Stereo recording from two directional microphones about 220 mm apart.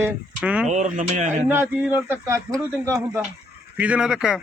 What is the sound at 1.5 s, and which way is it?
A man's voice, 10° right (ahead or behind).